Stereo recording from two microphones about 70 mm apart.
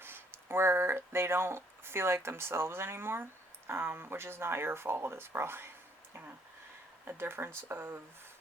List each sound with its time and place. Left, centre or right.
0.0 s speech: right
7.1 s speech: right